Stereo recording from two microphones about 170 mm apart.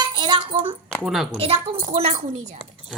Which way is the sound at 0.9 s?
Centre (ahead or behind).